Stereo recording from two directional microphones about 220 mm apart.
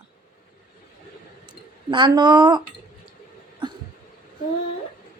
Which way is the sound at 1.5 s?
20° right (ahead or behind).